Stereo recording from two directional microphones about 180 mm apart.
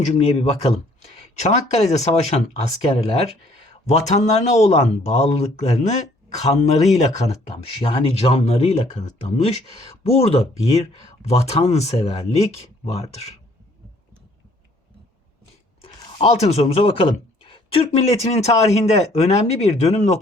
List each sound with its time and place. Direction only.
0.0 s speech: 35° left (ahead or behind)
15.8 s speech: 30° left (ahead or behind)